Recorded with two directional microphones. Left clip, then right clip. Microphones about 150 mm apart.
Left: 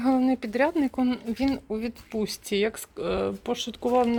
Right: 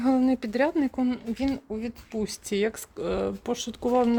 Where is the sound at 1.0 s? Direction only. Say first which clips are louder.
Left 2 dB; 10° right (ahead or behind).